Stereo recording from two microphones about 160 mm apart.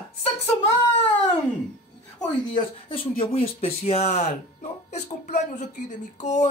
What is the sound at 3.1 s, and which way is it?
Speech, 30° left (ahead or behind).